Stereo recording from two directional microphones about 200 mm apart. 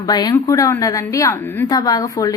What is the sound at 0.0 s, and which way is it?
A woman's voice, 20° left (ahead or behind).